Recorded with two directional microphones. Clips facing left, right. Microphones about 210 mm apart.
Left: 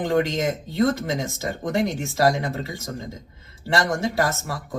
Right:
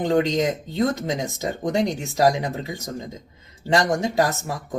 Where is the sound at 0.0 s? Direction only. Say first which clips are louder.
Right 2 dB; 20° right (ahead or behind).